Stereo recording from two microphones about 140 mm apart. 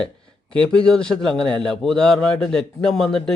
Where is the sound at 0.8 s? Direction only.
5° left (ahead or behind).